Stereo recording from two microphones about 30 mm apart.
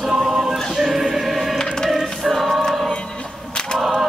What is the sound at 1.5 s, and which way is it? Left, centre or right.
Choir, centre.